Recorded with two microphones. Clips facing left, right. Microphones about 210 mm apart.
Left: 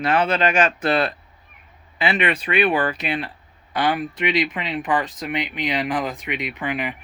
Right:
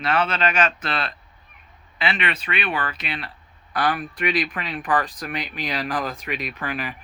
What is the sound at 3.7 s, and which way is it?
Speech, 25° left (ahead or behind).